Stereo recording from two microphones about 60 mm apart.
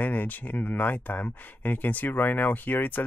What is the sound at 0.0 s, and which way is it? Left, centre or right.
Speech, left.